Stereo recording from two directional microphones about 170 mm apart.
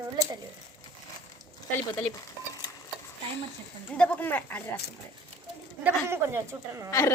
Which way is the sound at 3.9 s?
5° left (ahead or behind).